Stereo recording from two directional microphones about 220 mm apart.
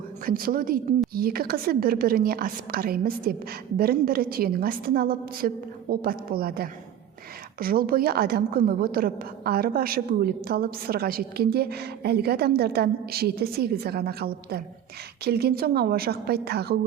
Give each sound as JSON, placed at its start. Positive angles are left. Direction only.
{"t": 0.3, "sound": "a woman's voice", "side_deg": -40}